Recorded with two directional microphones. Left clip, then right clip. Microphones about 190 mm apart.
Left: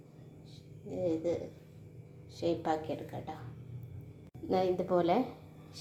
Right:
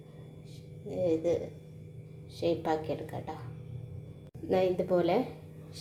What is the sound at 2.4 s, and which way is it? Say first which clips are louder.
Speech: right 2 dB; 5° right (ahead or behind).